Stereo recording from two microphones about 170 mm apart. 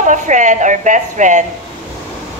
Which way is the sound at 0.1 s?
45° right (ahead or behind).